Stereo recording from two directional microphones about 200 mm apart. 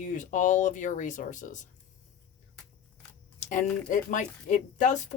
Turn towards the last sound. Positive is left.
turn(degrees=40)  # may be behind; listen again after turning